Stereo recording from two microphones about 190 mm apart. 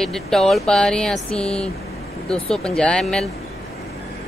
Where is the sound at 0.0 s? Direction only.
Centre (ahead or behind).